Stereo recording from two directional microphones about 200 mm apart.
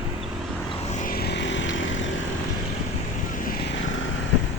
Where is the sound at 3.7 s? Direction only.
70° left (ahead or behind).